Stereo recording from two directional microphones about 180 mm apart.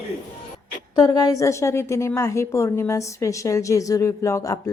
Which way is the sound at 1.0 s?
20° left (ahead or behind).